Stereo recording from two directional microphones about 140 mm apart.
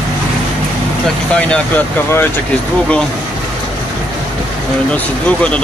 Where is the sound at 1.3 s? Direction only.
10° left (ahead or behind).